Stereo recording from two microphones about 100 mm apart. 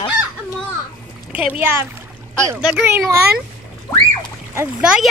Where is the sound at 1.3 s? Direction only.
15° right (ahead or behind).